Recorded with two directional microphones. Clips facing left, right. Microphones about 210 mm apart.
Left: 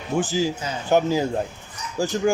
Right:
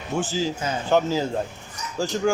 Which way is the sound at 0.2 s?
15° left (ahead or behind).